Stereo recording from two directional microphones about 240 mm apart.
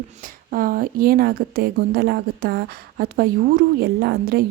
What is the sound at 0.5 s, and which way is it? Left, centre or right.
A woman's voice, right.